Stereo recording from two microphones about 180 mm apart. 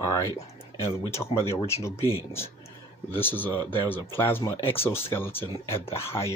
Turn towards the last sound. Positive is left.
turn(degrees=15)  # may be behind; listen again after turning